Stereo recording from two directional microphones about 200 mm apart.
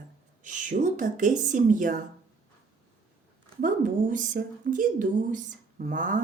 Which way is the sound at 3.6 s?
40° right (ahead or behind).